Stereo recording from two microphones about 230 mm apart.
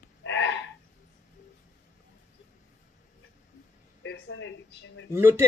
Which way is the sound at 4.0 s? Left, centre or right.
Left.